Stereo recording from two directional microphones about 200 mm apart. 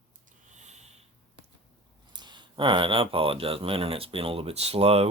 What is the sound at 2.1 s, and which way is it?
Speech, 20° right (ahead or behind).